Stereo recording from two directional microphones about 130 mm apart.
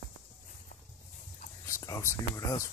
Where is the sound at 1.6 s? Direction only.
25° left (ahead or behind).